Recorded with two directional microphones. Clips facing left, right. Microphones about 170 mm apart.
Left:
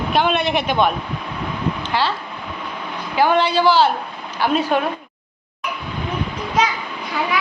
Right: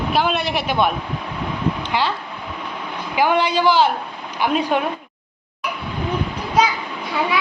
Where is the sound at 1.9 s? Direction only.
15° right (ahead or behind).